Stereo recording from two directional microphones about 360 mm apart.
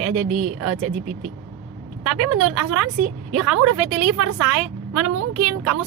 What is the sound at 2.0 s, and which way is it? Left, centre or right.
A woman's voice, right.